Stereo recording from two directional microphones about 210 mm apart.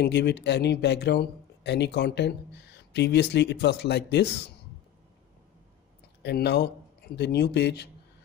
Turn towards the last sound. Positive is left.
turn(degrees=55)  # may be behind; listen again after turning